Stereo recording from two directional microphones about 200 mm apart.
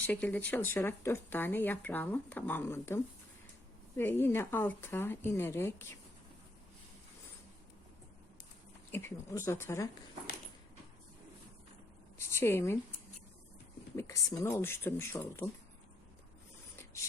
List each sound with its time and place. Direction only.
0.1 s speech: 10° left (ahead or behind)
8.9 s speech: 10° left (ahead or behind)
12.2 s speech: 10° left (ahead or behind)
13.9 s speech: 15° left (ahead or behind)